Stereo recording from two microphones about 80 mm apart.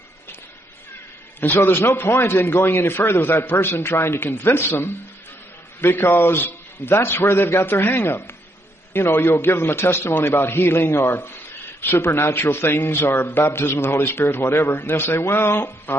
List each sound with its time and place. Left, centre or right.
1.4 s a man's voice: left